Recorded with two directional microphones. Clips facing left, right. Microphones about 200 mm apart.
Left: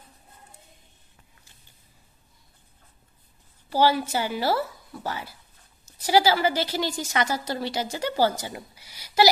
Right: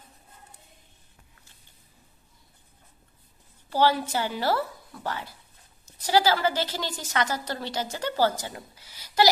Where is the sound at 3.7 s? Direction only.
10° left (ahead or behind).